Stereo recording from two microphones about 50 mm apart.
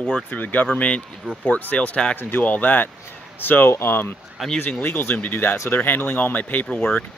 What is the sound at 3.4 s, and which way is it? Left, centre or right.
Speech, left.